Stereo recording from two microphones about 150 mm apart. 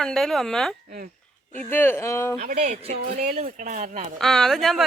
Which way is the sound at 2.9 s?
85° right.